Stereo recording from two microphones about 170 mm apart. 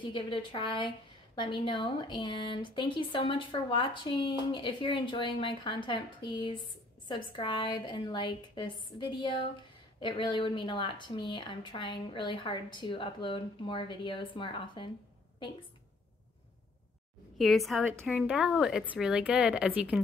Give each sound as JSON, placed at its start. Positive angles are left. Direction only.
{"t": 0.0, "sound": "a woman's voice", "side_deg": 30}
{"t": 17.4, "sound": "speech", "side_deg": 0}